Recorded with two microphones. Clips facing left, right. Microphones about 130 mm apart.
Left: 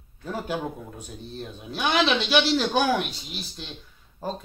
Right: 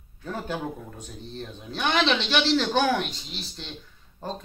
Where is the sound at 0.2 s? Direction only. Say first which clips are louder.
Left 2 dB; 10° left (ahead or behind).